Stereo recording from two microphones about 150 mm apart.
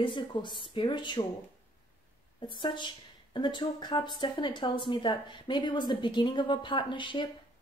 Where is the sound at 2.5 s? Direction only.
30° left (ahead or behind).